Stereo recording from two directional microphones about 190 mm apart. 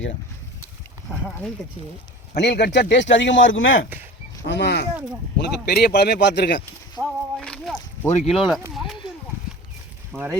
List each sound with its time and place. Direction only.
2.3 s speech: 65° left (ahead or behind); by 3.8 s 90° left
4.4 s a man's voice: 65° left (ahead or behind)
7.0 s a sound: 5° left (ahead or behind)
8.3 s speech: centre (ahead or behind)
8.7 s a sound: centre (ahead or behind)
10.1 s speech: 5° left (ahead or behind)